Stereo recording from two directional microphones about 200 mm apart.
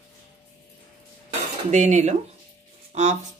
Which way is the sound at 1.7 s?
35° right (ahead or behind).